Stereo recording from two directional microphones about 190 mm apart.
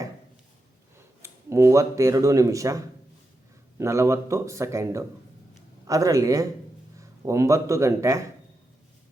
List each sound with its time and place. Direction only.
1.2 s speech: 15° right (ahead or behind)